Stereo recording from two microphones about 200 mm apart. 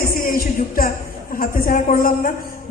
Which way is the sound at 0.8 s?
45° left (ahead or behind).